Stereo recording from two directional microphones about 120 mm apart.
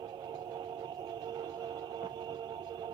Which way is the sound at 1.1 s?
35° right (ahead or behind).